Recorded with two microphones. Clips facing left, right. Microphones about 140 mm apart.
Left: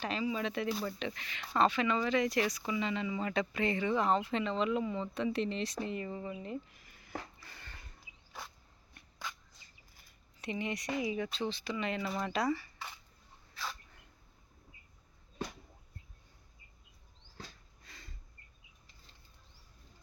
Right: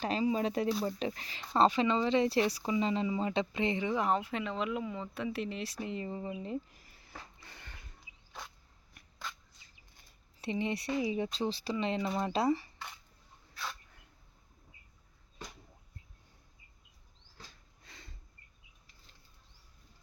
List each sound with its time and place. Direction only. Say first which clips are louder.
0.0 s speech: right 4 dB; 40° right (ahead or behind); by 5.7 s 5° right (ahead or behind)
5.9 s speech: right 1 dB; 25° right (ahead or behind)
7.3 s a sound: even; 20° right (ahead or behind)
8.3 s insect: even; 5° left (ahead or behind)
10.4 s speech: right 3 dB; 30° right (ahead or behind)
13.5 s dog: even; centre (ahead or behind)
17.8 s a sound: right 1 dB; 25° right (ahead or behind)